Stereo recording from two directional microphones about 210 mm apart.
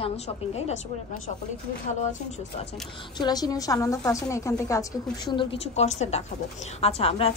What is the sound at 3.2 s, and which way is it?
A woman's voice, 20° left (ahead or behind).